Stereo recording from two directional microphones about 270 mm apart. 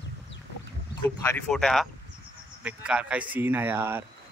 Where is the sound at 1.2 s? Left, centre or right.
Centre.